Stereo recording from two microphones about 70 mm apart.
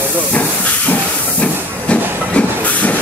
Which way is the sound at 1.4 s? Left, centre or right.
Centre.